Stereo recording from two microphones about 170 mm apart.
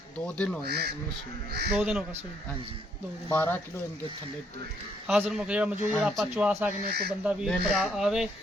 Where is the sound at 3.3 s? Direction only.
15° left (ahead or behind).